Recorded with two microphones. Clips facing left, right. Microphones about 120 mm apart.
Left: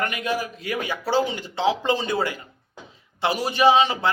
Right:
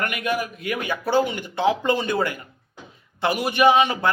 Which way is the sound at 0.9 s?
55° right (ahead or behind).